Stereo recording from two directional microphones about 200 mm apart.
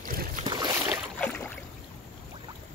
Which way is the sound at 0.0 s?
45° right (ahead or behind).